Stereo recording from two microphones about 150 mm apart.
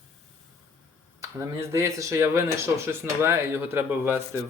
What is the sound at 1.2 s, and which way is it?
Speech, 20° right (ahead or behind).